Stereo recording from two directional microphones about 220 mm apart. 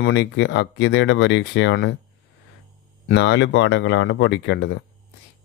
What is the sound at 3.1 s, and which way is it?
Speech, 55° left (ahead or behind).